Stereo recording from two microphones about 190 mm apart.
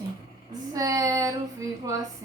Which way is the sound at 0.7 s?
20° right (ahead or behind).